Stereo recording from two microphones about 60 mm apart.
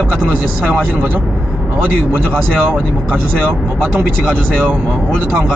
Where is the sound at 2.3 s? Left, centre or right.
Right.